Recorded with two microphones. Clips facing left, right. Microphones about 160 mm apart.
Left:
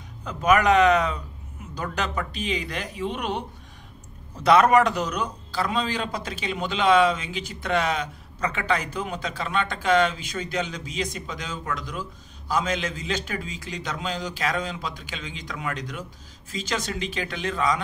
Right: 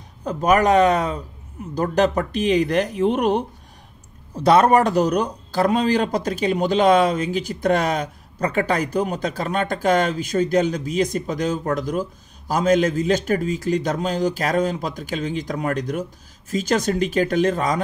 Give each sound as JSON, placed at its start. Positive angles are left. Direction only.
{"t": 0.2, "sound": "a man's voice", "side_deg": -40}